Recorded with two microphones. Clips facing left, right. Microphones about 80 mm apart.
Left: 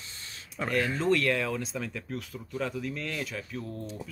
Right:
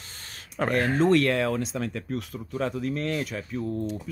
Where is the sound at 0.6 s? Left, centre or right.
Right.